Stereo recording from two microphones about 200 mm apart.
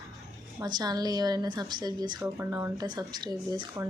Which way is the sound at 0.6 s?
20° right (ahead or behind).